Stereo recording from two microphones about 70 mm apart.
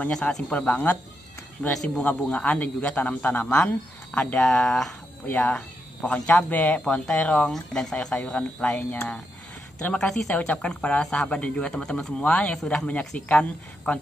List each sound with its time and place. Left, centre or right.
0.1 s speech: centre
1.7 s speech: centre
2.0 s a man's voice: centre
9.9 s speech: centre
11.7 s speech: centre
12.2 s speech: centre